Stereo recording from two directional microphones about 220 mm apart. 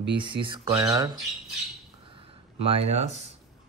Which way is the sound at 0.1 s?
20° right (ahead or behind).